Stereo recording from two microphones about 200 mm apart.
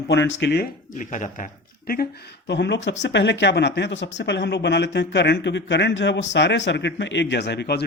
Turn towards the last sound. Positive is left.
turn(degrees=55)  # may be behind; listen again after turning